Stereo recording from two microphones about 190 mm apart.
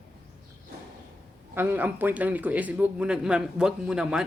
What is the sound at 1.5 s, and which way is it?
A man's voice, 10° right (ahead or behind).